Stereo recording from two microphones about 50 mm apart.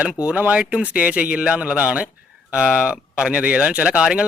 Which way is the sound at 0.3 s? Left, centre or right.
Right.